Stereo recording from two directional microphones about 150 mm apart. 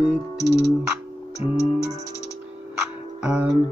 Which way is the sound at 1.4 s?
45° left (ahead or behind).